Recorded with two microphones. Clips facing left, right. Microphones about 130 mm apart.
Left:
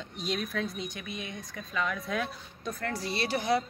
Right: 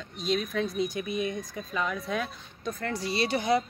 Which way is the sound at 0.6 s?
5° right (ahead or behind).